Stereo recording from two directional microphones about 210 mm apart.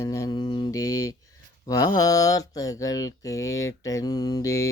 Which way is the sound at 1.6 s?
15° left (ahead or behind).